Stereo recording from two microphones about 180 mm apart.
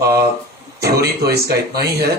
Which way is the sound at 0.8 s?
60° right (ahead or behind).